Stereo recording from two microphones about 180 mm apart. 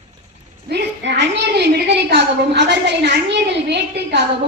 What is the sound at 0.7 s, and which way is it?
A woman's voice, 65° right (ahead or behind).